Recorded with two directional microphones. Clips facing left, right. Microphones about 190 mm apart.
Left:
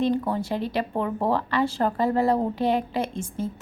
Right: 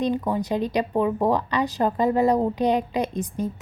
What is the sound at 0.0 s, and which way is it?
Speech, 15° right (ahead or behind).